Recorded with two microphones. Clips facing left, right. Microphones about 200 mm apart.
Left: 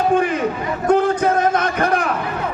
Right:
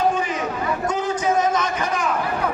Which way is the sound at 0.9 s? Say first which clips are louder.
Left 9 dB; 55° left (ahead or behind).